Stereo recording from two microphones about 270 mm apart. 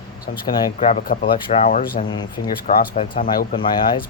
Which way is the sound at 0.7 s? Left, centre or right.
Left.